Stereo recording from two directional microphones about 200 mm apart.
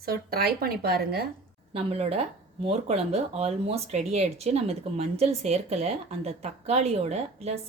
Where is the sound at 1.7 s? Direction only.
30° right (ahead or behind).